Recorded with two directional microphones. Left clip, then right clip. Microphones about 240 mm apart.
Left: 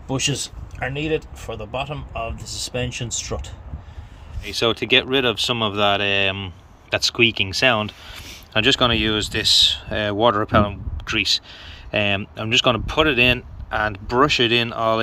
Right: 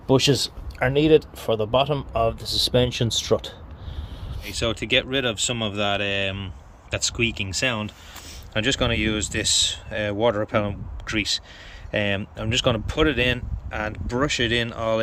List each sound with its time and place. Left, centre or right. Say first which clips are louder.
0.1 s speech: right 5 dB; right
4.4 s speech: left 5 dB; centre